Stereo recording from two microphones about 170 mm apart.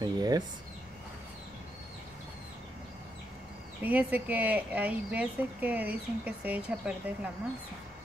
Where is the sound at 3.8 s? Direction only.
10° right (ahead or behind).